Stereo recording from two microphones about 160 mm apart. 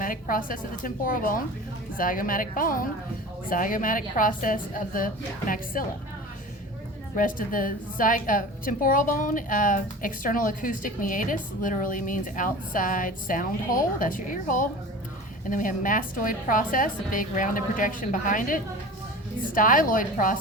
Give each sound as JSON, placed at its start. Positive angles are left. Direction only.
{"t": 0.0, "sound": "a woman's voice", "side_deg": 60}
{"t": 7.2, "sound": "a woman's voice", "side_deg": 60}